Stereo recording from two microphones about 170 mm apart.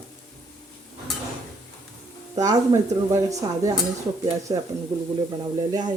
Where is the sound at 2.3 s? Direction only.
20° right (ahead or behind).